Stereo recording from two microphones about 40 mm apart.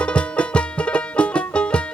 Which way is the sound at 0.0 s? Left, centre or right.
Left.